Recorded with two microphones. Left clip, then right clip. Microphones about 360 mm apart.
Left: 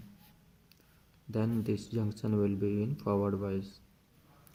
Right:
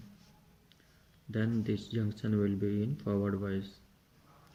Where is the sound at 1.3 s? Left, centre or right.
Left.